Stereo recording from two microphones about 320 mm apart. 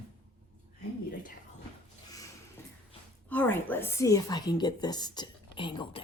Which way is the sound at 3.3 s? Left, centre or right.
Centre.